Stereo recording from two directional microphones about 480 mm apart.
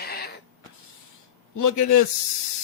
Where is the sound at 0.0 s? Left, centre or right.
Centre.